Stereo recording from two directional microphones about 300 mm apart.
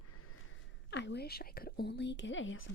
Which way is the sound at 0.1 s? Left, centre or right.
Left.